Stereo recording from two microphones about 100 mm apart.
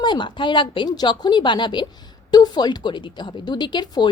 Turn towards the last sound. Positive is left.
turn(degrees=45)  # may be behind; listen again after turning